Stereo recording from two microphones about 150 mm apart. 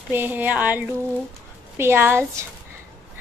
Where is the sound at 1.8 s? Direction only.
15° right (ahead or behind).